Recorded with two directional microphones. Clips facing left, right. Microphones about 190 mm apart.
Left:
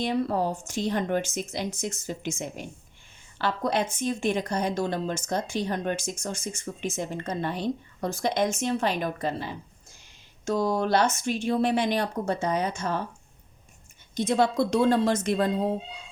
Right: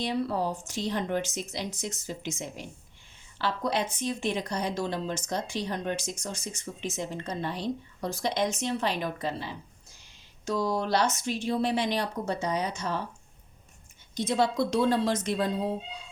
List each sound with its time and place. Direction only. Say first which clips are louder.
0.0 s a woman's voice: left 3 dB; 50° left (ahead or behind)
14.2 s a woman's voice: left 3 dB; 50° left (ahead or behind)